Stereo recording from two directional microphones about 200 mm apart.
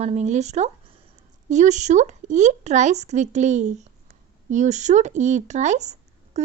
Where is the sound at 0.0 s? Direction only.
35° right (ahead or behind).